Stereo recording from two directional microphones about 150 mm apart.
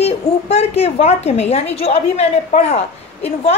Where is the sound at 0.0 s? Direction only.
45° left (ahead or behind).